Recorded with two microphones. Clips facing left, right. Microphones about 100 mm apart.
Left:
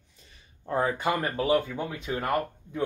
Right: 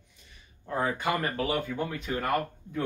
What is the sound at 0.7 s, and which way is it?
Speech, 30° left (ahead or behind).